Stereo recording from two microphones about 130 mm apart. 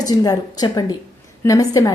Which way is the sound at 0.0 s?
30° left (ahead or behind).